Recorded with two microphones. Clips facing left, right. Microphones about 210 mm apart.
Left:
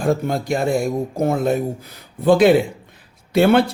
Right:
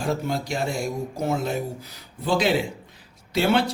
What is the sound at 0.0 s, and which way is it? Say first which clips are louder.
Speech: left 6 dB; 55° left (ahead or behind).